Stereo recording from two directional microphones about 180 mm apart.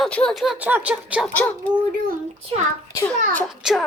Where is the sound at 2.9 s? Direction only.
15° left (ahead or behind).